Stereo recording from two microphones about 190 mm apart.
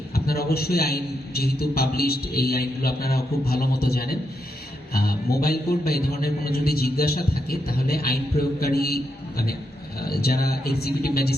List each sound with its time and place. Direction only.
0.3 s a man's voice: 55° left (ahead or behind)
10.1 s speech: 55° left (ahead or behind)